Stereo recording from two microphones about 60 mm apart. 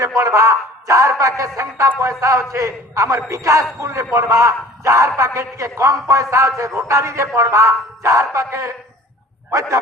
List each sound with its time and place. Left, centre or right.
0.2 s a man's voice: right